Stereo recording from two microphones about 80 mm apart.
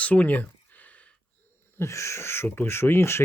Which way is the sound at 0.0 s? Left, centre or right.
Centre.